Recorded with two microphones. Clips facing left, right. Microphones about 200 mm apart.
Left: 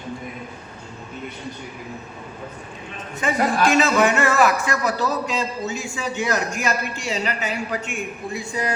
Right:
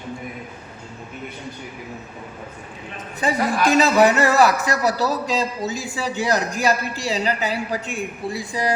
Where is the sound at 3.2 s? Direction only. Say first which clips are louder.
Even; 35° right (ahead or behind).